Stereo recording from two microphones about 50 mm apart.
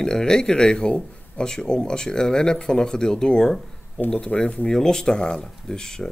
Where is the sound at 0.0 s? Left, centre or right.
Centre.